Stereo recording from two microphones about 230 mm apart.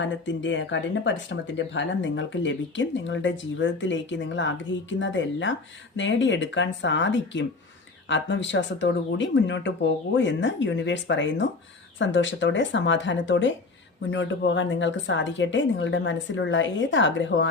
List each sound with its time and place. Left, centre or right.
0.0 s speech: left